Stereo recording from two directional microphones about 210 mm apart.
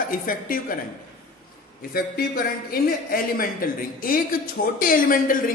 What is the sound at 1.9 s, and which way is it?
A man's voice, 45° left (ahead or behind).